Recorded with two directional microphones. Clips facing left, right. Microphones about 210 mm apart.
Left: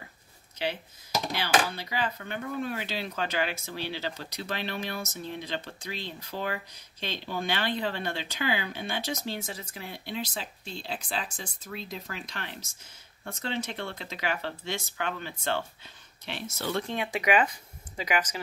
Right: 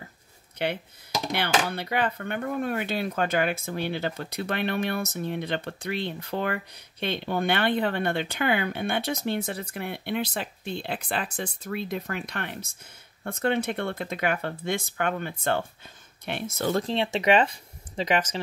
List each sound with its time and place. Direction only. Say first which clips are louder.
1.3 s speech: right 2 dB; 60° right (ahead or behind)
16.7 s speech: right 3 dB; 30° right (ahead or behind)